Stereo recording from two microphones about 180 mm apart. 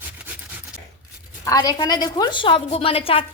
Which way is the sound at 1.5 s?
20° left (ahead or behind).